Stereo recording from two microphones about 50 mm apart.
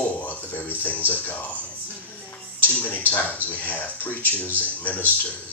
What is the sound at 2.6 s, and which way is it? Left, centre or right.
Speech, left.